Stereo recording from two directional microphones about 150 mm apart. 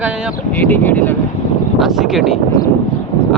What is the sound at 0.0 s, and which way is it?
Speech, 5° right (ahead or behind).